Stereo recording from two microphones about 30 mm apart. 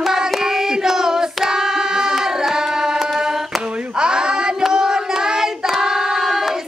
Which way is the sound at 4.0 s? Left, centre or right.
Right.